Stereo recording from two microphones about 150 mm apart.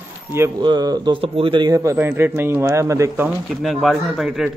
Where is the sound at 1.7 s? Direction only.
20° right (ahead or behind).